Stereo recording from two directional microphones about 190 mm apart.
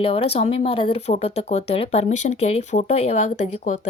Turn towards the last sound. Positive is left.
turn(degrees=35)  # may be behind; listen again after turning